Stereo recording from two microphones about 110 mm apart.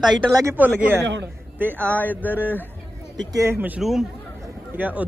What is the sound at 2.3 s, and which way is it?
Speech, 15° right (ahead or behind).